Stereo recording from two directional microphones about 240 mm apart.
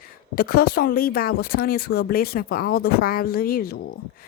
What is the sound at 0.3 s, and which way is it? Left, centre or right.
Speech, left.